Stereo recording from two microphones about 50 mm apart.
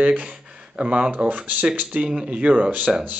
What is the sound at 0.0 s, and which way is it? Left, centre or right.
Speech, right.